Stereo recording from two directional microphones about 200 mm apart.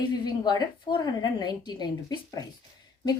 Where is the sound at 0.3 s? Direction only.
20° left (ahead or behind).